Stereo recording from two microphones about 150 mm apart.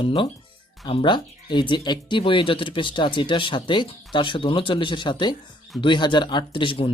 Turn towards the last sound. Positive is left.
turn(degrees=35)  # may be behind; listen again after turning